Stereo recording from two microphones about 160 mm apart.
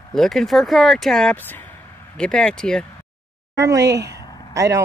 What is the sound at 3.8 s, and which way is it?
Speech, 90° right.